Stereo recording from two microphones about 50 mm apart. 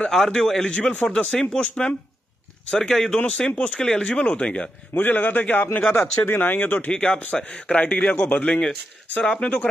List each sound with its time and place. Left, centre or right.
0.1 s a man's voice: centre
4.9 s a man's voice: left
6.9 s speech: centre
9.2 s speech: centre